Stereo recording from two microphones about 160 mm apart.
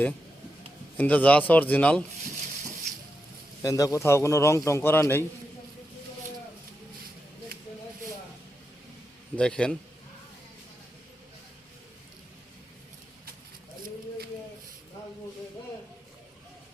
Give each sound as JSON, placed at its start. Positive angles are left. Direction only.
{"t": 0.9, "sound": "a man's voice", "side_deg": 10}
{"t": 3.6, "sound": "a man's voice", "side_deg": 20}
{"t": 9.3, "sound": "a man's voice", "side_deg": 5}